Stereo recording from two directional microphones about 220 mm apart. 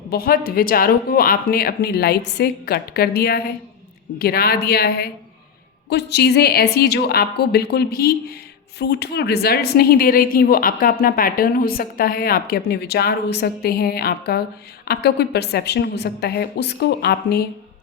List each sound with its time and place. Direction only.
0.1 s a woman's voice: 40° left (ahead or behind)